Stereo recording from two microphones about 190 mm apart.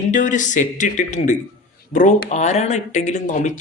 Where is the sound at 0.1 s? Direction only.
40° left (ahead or behind).